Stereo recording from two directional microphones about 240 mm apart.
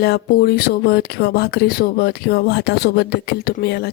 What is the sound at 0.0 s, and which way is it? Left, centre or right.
Speech, left.